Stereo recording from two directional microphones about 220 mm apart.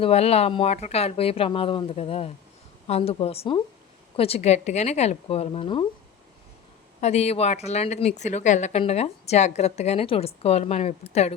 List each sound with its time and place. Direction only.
0.0 s a woman's voice: 30° left (ahead or behind)
7.0 s a woman's voice: 30° left (ahead or behind)